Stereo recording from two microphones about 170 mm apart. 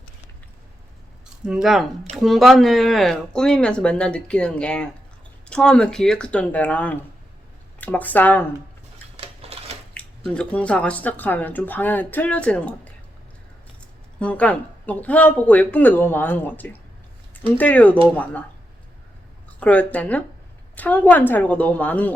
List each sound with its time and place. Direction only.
1.5 s speech: 5° right (ahead or behind)
9.1 s a sound: 35° right (ahead or behind)
9.9 s speech: 5° left (ahead or behind)
14.2 s speech: 5° left (ahead or behind)
19.5 s speech: 10° left (ahead or behind)